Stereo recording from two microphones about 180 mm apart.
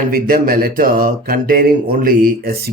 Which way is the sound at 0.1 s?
55° right (ahead or behind).